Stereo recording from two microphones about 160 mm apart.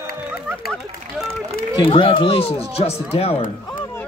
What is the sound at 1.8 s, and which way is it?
Speech, 35° left (ahead or behind).